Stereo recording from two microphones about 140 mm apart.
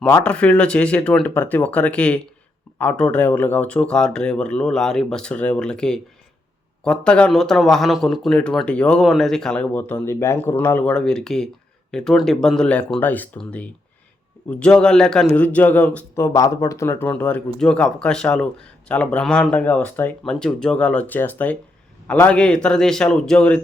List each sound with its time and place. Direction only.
0.0 s speech: 10° left (ahead or behind)
16.2 s speech: 20° left (ahead or behind); by 23.6 s 5° left (ahead or behind)